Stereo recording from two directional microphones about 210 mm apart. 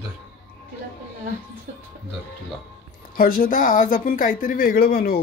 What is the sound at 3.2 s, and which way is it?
Speech, 40° left (ahead or behind).